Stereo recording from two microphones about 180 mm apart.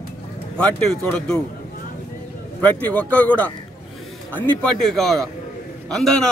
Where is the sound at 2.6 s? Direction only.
10° left (ahead or behind).